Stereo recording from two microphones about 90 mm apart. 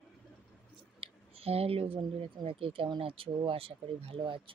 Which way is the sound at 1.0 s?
90° right.